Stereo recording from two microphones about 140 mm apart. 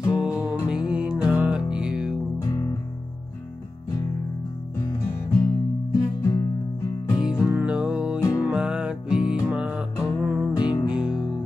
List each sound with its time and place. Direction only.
0.2 s music: 5° right (ahead or behind)
2.4 s music: 25° left (ahead or behind)
4.7 s music: 30° left (ahead or behind)
7.2 s music: 5° right (ahead or behind)
8.2 s music: 25° left (ahead or behind)
8.5 s music: 5° right (ahead or behind)
10.6 s music: 35° left (ahead or behind)
10.9 s music: 5° right (ahead or behind)